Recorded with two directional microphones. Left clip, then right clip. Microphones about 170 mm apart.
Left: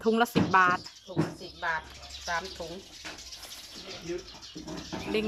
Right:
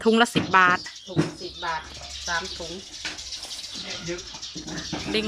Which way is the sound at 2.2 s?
5° left (ahead or behind).